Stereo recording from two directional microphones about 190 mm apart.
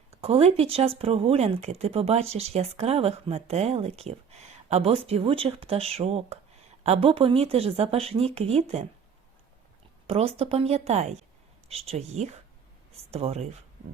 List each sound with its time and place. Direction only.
0.2 s speech: 30° right (ahead or behind)
10.1 s speech: 30° right (ahead or behind)